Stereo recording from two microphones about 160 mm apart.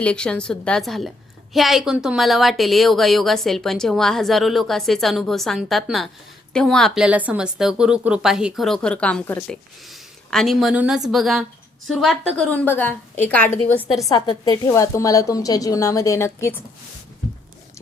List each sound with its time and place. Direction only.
0.0 s a woman's voice: 5° left (ahead or behind)
9.9 s a sound: centre (ahead or behind)
11.1 s a woman's voice: centre (ahead or behind)
14.1 s a woman's voice: 25° left (ahead or behind)
14.7 s a woman's voice: 20° left (ahead or behind)